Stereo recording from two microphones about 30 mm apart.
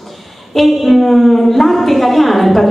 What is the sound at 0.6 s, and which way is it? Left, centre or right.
A woman's voice, centre.